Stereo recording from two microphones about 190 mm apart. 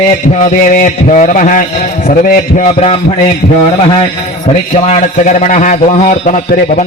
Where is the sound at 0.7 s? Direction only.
40° left (ahead or behind).